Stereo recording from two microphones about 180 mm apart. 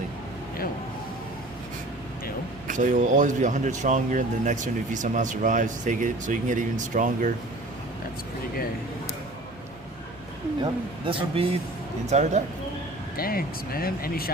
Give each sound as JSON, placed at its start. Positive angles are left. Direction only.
{"t": 2.6, "sound": "speech", "side_deg": -45}
{"t": 10.6, "sound": "speech", "side_deg": -30}
{"t": 13.1, "sound": "speech", "side_deg": 55}